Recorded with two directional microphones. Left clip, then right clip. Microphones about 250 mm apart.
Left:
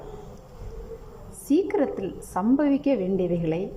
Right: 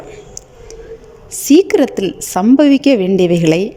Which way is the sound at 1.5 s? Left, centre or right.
Right.